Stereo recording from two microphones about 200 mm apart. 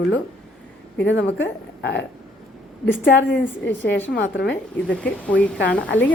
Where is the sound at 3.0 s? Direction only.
60° left (ahead or behind).